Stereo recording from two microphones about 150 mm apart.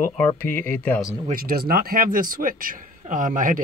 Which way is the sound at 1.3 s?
75° right (ahead or behind).